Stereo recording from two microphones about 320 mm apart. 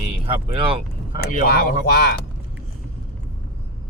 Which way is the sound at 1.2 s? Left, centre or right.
Left.